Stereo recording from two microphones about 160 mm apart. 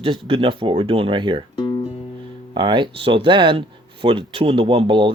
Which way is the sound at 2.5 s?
30° right (ahead or behind).